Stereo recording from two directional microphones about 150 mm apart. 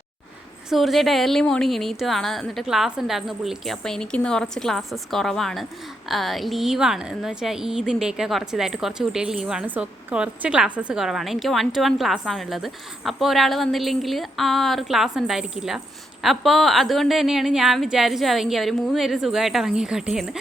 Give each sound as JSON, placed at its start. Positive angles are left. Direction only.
{"t": 0.7, "sound": "a woman's voice", "side_deg": 0}